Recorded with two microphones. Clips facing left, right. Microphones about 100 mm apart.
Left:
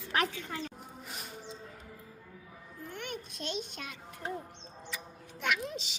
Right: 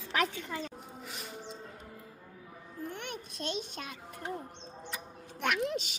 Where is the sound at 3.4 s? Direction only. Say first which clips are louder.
Right 3 dB; 50° right (ahead or behind).